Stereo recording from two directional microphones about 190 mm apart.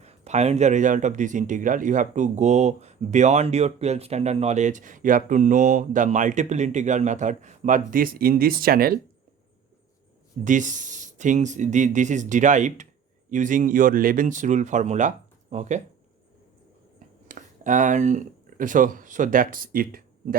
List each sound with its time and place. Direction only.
0.0 s speech: 35° right (ahead or behind); by 9.0 s 50° right (ahead or behind)
10.4 s speech: 40° right (ahead or behind)
17.2 s speech: 45° right (ahead or behind)